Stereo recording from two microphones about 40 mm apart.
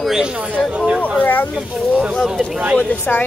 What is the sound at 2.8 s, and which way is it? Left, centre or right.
Speech, left.